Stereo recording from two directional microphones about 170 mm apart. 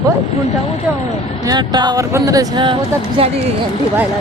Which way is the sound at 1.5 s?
25° right (ahead or behind).